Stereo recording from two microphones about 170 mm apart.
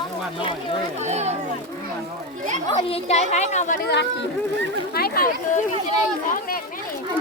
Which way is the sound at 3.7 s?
90° left.